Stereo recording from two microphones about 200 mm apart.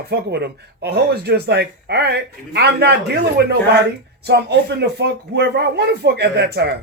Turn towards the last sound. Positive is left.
turn(degrees=-55)  # may be behind; listen again after turning